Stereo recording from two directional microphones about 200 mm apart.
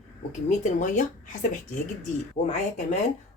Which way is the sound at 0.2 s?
40° left (ahead or behind).